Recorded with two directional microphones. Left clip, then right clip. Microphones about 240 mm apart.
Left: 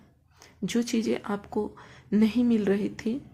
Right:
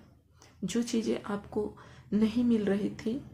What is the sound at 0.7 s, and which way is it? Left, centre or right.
Speech, left.